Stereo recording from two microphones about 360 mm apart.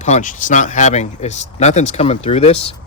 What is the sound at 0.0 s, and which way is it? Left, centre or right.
Speech, centre.